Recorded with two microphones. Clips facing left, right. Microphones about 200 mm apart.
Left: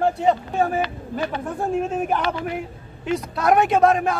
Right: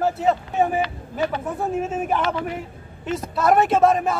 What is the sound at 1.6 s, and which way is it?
Speech, 5° right (ahead or behind).